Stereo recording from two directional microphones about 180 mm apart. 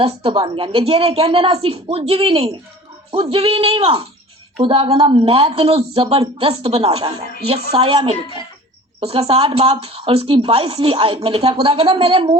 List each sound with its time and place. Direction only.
0.0 s speech: 30° right (ahead or behind)